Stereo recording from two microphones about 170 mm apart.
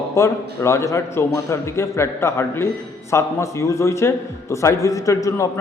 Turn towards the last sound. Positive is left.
turn(degrees=20)  # may be behind; listen again after turning